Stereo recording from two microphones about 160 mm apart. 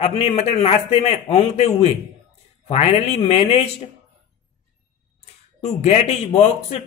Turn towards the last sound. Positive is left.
turn(degrees=40)  # may be behind; listen again after turning